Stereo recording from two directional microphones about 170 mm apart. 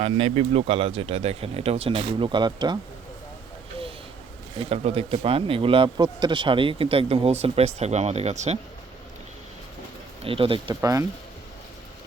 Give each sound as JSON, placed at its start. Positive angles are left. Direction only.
{"t": 0.0, "sound": "speech", "side_deg": -35}
{"t": 4.6, "sound": "speech", "side_deg": -35}
{"t": 10.2, "sound": "speech", "side_deg": -30}
{"t": 10.8, "sound": "speech", "side_deg": -20}